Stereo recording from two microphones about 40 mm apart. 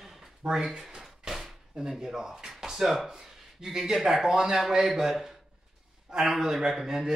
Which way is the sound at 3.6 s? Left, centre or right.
Centre.